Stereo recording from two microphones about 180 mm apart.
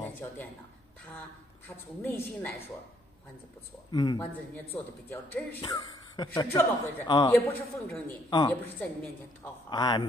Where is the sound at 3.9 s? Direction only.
20° left (ahead or behind).